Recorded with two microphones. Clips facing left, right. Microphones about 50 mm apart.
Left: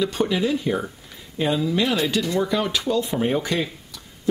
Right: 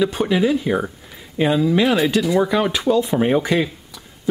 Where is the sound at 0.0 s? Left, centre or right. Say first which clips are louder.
Right 4 dB; centre.